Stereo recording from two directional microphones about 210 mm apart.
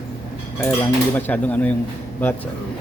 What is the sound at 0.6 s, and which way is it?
Cutlery, 10° left (ahead or behind).